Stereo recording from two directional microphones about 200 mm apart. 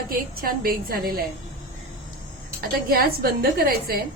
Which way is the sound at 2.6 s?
45° right (ahead or behind).